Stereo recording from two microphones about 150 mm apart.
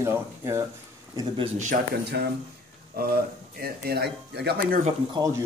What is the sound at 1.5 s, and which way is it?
Speech, 60° right (ahead or behind).